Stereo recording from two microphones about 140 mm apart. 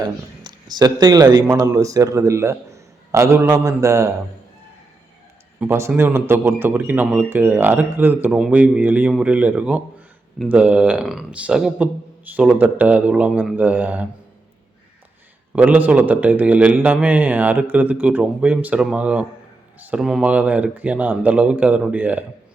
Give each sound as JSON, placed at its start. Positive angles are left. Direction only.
{"t": 0.0, "sound": "a man's voice", "side_deg": -30}
{"t": 5.5, "sound": "a man's voice", "side_deg": -20}
{"t": 15.5, "sound": "a man's voice", "side_deg": -10}